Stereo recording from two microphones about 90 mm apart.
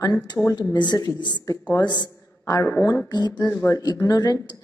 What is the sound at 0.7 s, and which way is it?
A woman's voice, 55° left (ahead or behind).